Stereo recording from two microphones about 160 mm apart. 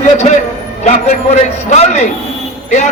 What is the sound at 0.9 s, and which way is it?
A man's voice, 45° left (ahead or behind).